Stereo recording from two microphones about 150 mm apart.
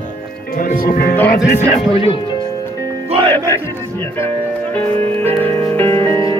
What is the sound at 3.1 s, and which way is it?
Music, 35° right (ahead or behind).